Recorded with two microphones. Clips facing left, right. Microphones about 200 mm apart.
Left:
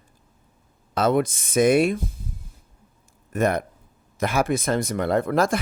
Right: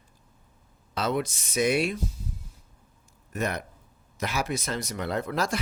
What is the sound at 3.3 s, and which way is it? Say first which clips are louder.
Speech: left 8 dB; 50° left (ahead or behind).